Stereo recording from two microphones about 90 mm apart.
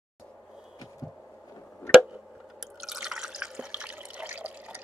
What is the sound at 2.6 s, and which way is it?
Drip, 5° right (ahead or behind).